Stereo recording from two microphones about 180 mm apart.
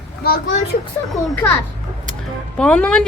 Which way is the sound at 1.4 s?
15° left (ahead or behind).